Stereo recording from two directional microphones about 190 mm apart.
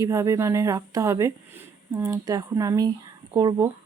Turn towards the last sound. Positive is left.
turn(degrees=-20)  # may be behind; listen again after turning